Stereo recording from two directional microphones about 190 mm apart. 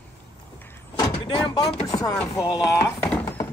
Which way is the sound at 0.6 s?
10° left (ahead or behind).